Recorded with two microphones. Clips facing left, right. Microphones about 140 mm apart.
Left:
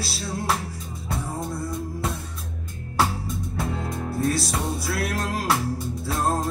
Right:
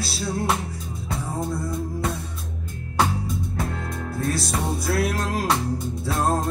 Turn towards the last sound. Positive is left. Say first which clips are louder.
# right 2 dB
turn(degrees=0)  # may be behind; listen again after turning